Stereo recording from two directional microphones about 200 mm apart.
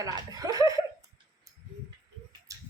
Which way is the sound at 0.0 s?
20° right (ahead or behind).